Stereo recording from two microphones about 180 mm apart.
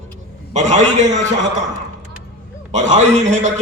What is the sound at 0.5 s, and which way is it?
Mantra, 40° right (ahead or behind).